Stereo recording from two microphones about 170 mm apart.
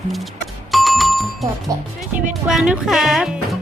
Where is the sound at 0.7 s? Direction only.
Centre (ahead or behind).